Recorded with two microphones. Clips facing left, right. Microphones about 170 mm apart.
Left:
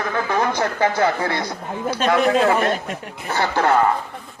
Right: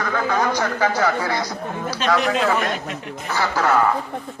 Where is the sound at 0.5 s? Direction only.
25° left (ahead or behind).